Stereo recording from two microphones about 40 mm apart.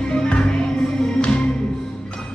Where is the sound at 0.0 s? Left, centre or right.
Left.